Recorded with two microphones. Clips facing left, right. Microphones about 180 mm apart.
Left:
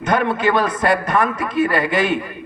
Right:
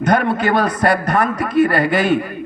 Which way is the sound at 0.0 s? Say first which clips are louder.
Right 2 dB; 40° right (ahead or behind).